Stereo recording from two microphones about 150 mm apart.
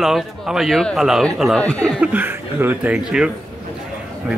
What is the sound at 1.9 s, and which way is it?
A man's voice, 10° right (ahead or behind).